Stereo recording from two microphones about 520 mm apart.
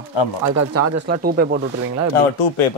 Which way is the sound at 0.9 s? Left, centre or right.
Centre.